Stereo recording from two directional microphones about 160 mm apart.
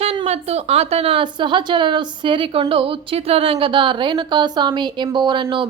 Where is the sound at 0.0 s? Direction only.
40° right (ahead or behind).